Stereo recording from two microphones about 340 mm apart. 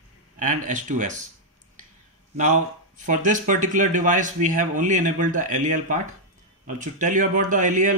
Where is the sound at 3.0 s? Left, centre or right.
Right.